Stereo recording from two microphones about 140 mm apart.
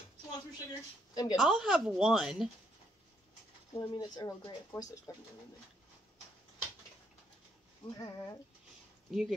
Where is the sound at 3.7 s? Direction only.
25° left (ahead or behind).